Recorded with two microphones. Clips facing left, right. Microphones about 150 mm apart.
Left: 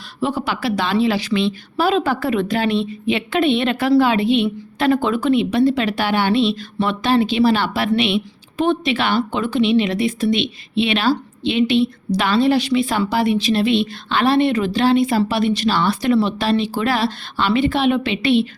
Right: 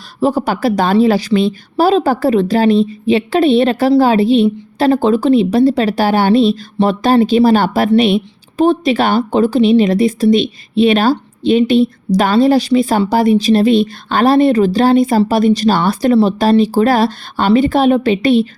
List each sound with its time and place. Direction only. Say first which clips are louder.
0.2 s a woman's voice: right 7 dB; 40° right (ahead or behind)